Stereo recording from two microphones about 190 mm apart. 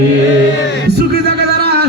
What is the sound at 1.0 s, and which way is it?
Music, 60° right (ahead or behind).